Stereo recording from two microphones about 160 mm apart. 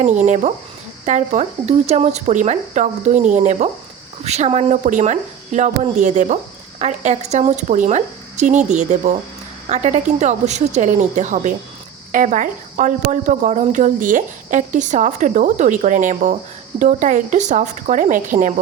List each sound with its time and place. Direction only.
0.0 s speech: 50° right (ahead or behind)